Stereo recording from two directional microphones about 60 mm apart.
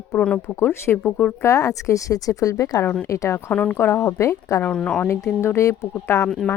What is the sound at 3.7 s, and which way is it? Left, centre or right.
Speech, left.